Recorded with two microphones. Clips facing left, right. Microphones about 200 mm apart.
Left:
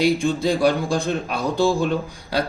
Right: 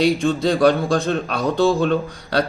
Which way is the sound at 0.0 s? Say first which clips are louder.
Right 2 dB; 10° left (ahead or behind).